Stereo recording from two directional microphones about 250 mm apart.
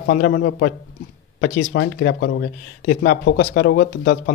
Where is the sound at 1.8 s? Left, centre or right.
Left.